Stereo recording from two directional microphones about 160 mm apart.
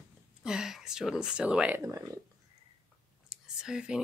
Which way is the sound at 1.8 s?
20° right (ahead or behind).